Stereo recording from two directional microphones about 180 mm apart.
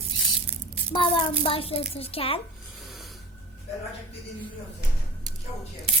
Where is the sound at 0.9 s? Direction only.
25° left (ahead or behind).